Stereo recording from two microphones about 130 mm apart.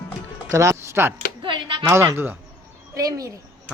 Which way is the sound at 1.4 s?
40° right (ahead or behind).